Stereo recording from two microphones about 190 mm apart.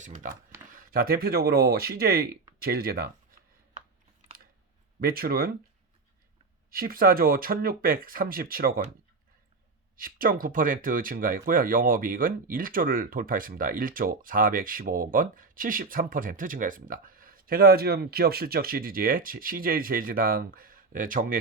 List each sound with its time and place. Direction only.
0.0 s speech: 40° right (ahead or behind)
4.9 s speech: 50° right (ahead or behind)
6.7 s speech: 50° right (ahead or behind)
10.0 s speech: 50° right (ahead or behind)